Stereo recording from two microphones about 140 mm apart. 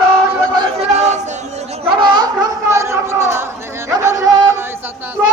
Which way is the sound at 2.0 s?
30° right (ahead or behind).